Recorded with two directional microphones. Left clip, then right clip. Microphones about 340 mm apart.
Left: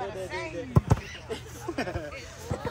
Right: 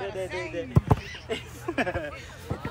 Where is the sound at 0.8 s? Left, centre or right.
Right.